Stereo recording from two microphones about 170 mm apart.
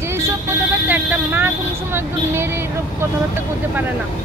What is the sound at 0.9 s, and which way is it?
Speech, 10° right (ahead or behind).